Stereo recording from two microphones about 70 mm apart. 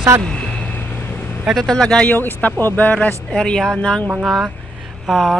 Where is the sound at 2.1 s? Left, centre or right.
Left.